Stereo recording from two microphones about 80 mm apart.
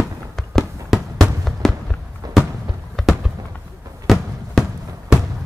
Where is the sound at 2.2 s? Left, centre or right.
Right.